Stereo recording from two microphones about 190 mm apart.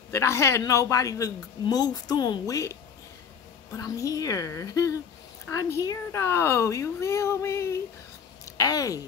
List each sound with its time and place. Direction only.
0.1 s speech: 15° left (ahead or behind)